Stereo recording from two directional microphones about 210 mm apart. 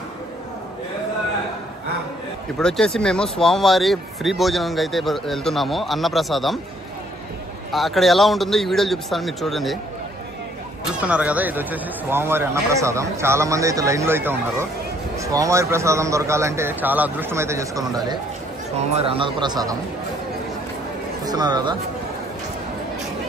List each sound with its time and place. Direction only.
2.6 s speech: 5° left (ahead or behind)
7.7 s speech: centre (ahead or behind)
11.0 s a man's voice: 5° right (ahead or behind)
21.2 s speech: 20° right (ahead or behind)